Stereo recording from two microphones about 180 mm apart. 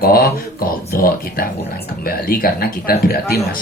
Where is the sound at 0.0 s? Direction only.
55° left (ahead or behind).